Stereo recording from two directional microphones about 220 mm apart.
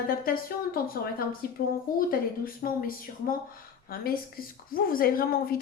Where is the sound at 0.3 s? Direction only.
40° left (ahead or behind).